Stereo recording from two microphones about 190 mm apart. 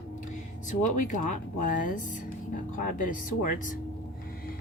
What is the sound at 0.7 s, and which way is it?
Speech, 40° left (ahead or behind).